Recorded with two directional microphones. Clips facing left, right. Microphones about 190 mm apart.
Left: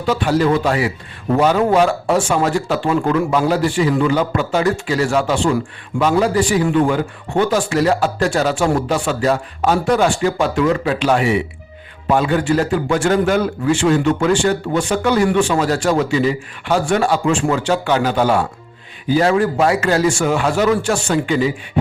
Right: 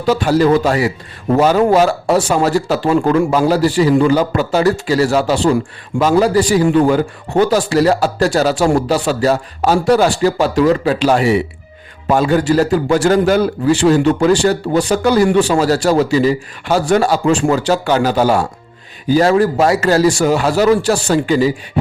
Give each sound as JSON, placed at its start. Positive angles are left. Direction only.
{"t": 0.1, "sound": "a man's voice", "side_deg": -40}